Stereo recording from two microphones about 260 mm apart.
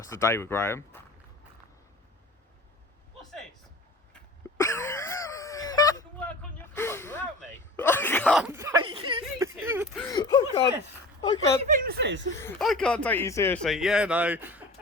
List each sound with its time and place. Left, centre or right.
0.1 s speech: centre
4.1 s wheeze: centre
7.8 s a sound: centre
10.1 s speech: centre
11.6 s speech: right
12.4 s speech: centre